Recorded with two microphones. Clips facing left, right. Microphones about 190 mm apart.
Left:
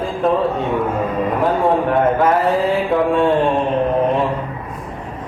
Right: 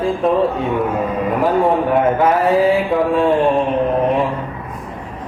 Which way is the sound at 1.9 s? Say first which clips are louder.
Right 1 dB; centre (ahead or behind).